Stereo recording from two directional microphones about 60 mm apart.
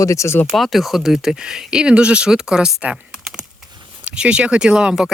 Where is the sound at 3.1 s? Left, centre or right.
Centre.